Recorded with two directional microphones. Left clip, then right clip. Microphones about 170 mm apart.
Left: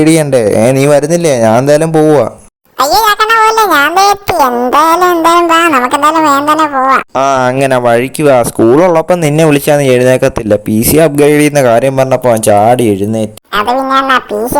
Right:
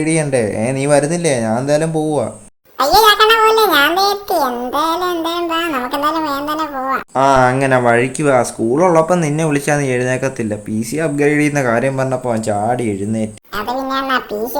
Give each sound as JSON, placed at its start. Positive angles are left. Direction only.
{"t": 0.0, "sound": "speech", "side_deg": 50}
{"t": 2.8, "sound": "a sound", "side_deg": 60}
{"t": 4.7, "sound": "speech", "side_deg": 55}
{"t": 5.4, "sound": "music", "side_deg": 30}
{"t": 6.0, "sound": "speech", "side_deg": 40}
{"t": 7.2, "sound": "speech", "side_deg": 60}